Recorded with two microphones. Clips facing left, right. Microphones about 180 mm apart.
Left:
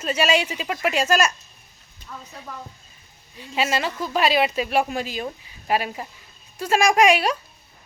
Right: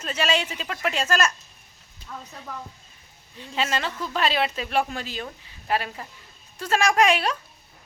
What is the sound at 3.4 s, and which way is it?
A woman's voice, 10° left (ahead or behind).